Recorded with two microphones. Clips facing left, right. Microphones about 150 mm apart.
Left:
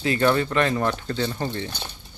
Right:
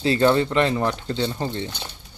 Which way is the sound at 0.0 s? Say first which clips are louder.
Right 3 dB; 25° right (ahead or behind).